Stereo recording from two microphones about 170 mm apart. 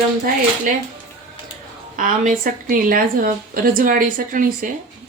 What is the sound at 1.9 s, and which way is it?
A woman's voice, 50° right (ahead or behind).